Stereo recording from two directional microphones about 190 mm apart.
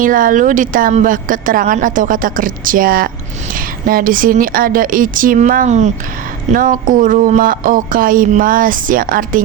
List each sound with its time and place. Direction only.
0.0 s speech: 45° right (ahead or behind)